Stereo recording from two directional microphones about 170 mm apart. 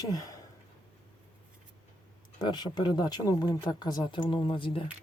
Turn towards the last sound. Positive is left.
turn(degrees=30)  # may be behind; listen again after turning